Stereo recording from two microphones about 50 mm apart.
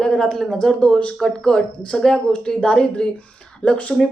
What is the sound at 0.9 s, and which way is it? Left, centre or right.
Speech, left.